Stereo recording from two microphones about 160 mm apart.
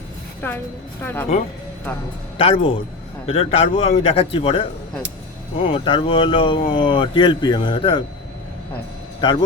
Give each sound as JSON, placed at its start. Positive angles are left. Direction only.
{"t": 0.4, "sound": "speech", "side_deg": 15}
{"t": 2.4, "sound": "speech", "side_deg": 35}
{"t": 5.6, "sound": "speech", "side_deg": 35}